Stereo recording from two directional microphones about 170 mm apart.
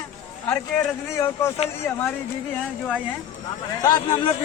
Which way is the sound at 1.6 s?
35° left (ahead or behind).